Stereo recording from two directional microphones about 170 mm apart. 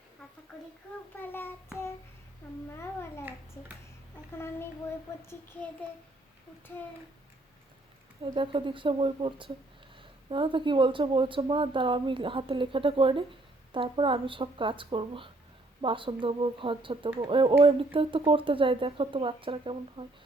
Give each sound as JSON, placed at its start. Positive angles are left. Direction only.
{"t": 1.1, "sound": "a child's voice", "side_deg": 10}
{"t": 2.7, "sound": "a child's voice", "side_deg": 15}
{"t": 4.4, "sound": "a child's voice", "side_deg": 15}
{"t": 8.2, "sound": "speech", "side_deg": -30}